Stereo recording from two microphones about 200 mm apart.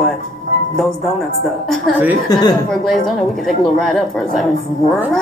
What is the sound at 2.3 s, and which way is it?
Speech, 20° left (ahead or behind).